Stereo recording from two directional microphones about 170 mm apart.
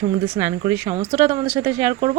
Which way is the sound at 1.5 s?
15° right (ahead or behind).